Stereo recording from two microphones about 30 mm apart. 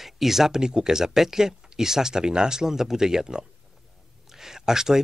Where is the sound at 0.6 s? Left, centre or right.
Right.